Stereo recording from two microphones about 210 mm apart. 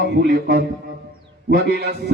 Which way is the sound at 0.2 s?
50° right (ahead or behind).